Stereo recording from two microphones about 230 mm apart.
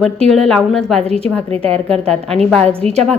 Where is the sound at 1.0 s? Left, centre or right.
Right.